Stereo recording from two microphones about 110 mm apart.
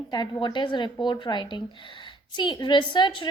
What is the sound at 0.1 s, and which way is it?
A woman's voice, 35° left (ahead or behind).